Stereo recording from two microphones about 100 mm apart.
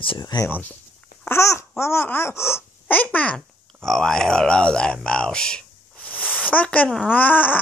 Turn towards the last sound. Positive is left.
turn(degrees=15)  # may be behind; listen again after turning